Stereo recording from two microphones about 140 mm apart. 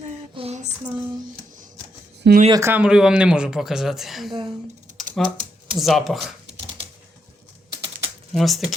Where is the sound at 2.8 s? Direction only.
5° right (ahead or behind).